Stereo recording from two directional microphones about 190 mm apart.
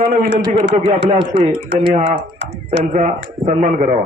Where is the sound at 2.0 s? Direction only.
65° right (ahead or behind).